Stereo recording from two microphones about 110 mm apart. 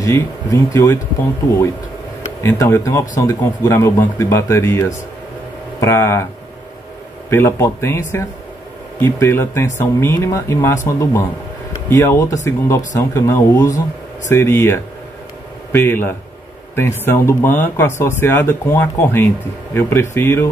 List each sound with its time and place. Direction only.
0.0 s speech: 30° left (ahead or behind)
2.5 s speech: 30° left (ahead or behind)
7.2 s speech: 25° left (ahead or behind)